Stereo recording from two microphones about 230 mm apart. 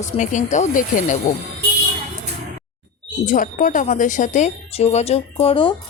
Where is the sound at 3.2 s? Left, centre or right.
Left.